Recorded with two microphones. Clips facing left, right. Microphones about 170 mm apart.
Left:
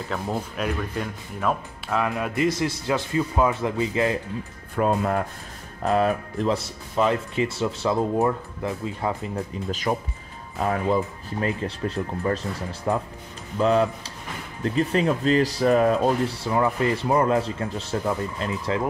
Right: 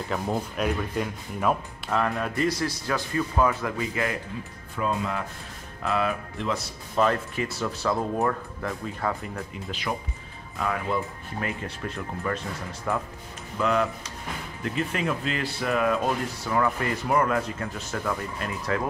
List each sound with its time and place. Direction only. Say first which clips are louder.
0.1 s speech: even; centre (ahead or behind)
2.3 s speech: left 3 dB; 20° left (ahead or behind)
4.7 s speech: left 6 dB; 50° left (ahead or behind)
5.8 s speech: left 5 dB; 40° left (ahead or behind)
7.0 s speech: left 2 dB; 20° left (ahead or behind)
9.7 s speech: left 5 dB; 45° left (ahead or behind); by 18.8 s 25° left (ahead or behind)